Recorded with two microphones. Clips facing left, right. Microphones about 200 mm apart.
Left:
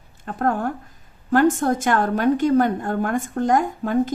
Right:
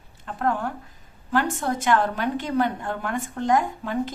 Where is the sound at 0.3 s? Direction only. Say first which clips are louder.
Left 3 dB; 45° left (ahead or behind).